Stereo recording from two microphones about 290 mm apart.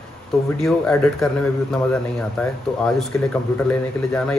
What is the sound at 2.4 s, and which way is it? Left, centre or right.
Speech, centre.